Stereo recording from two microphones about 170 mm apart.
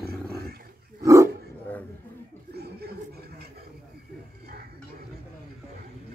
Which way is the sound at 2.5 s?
70° right (ahead or behind).